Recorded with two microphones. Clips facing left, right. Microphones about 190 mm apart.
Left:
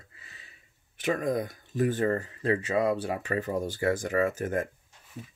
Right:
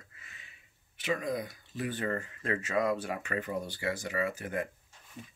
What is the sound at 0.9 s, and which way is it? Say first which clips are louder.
Speech: left 5 dB; 50° left (ahead or behind).